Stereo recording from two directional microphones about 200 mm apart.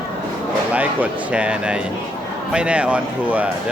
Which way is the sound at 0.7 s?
5° right (ahead or behind).